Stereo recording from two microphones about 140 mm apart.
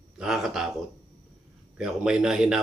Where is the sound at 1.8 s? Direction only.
5° right (ahead or behind).